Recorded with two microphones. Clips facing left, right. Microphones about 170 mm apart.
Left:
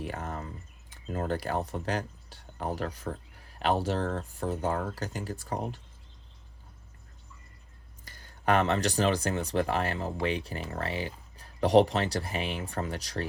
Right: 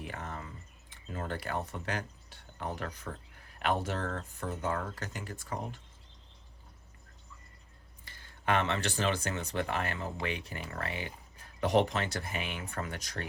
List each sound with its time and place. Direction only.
0.0 s a sound: 35° left (ahead or behind)
3.6 s speech: 30° left (ahead or behind)
8.0 s speech: 40° left (ahead or behind)